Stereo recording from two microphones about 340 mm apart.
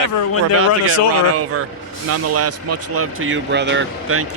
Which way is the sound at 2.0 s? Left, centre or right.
Right.